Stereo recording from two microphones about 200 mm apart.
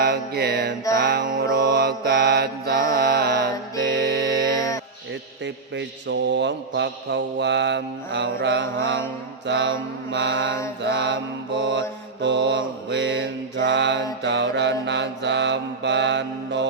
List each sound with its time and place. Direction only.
0.0 s music: 55° right (ahead or behind)
0.9 s mantra: 50° right (ahead or behind)
5.7 s mantra: 60° right (ahead or behind)